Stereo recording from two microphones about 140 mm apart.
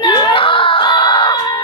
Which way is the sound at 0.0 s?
30° left (ahead or behind).